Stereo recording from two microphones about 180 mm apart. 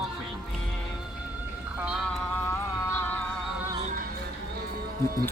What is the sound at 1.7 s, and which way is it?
Music, 5° right (ahead or behind).